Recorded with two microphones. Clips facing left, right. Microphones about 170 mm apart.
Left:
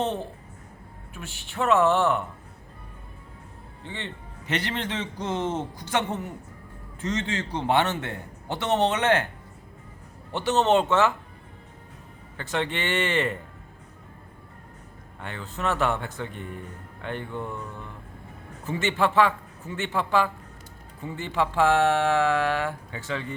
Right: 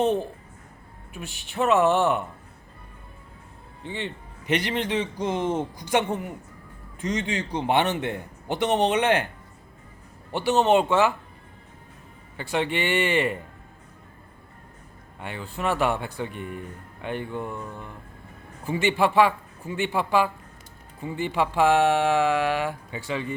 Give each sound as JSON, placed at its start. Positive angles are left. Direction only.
{"t": 1.1, "sound": "a man's voice", "side_deg": -15}
{"t": 3.8, "sound": "a man's voice", "side_deg": -15}
{"t": 10.3, "sound": "a man's voice", "side_deg": -10}
{"t": 12.4, "sound": "a man's voice", "side_deg": -10}
{"t": 15.2, "sound": "a man's voice", "side_deg": -10}